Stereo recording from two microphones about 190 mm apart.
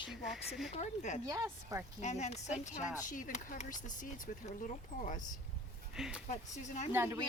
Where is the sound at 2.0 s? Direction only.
35° left (ahead or behind).